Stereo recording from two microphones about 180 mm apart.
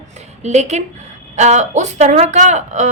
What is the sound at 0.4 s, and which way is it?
A woman's voice, 40° right (ahead or behind).